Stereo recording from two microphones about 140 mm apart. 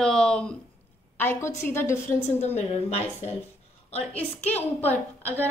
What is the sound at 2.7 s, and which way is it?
Speech, 45° left (ahead or behind).